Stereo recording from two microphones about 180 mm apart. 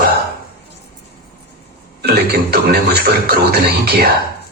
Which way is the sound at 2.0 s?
65° right (ahead or behind).